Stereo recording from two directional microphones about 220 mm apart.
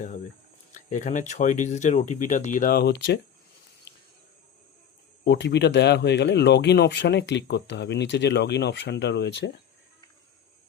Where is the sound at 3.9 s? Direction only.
50° left (ahead or behind).